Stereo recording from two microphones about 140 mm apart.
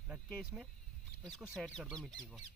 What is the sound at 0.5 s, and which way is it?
Speech, 5° right (ahead or behind).